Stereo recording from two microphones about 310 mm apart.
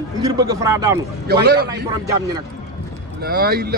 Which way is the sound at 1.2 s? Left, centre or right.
Right.